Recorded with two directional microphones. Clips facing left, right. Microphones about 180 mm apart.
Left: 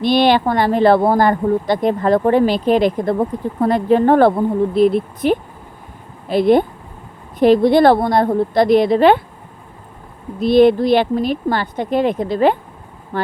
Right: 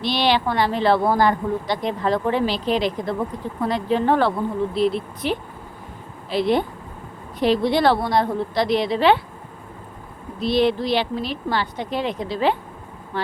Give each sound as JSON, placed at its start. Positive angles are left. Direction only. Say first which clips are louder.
{"t": 0.0, "sound": "speech", "louder": "left 7 dB", "side_deg": 50}
{"t": 10.4, "sound": "speech", "louder": "left 8 dB", "side_deg": 50}